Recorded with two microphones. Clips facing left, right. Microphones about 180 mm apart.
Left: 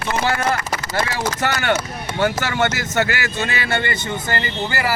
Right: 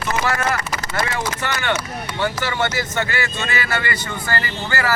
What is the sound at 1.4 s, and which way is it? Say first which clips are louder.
Speech: left 5 dB; 45° left (ahead or behind).